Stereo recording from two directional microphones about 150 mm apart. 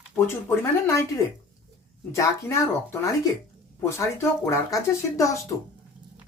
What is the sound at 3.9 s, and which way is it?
Speech, 20° left (ahead or behind).